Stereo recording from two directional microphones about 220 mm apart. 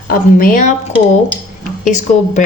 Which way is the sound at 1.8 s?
35° left (ahead or behind).